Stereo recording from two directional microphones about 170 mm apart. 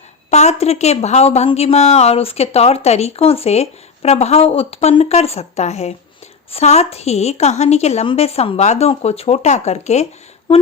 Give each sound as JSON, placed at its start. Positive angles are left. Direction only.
{"t": 0.3, "sound": "a woman's voice", "side_deg": 40}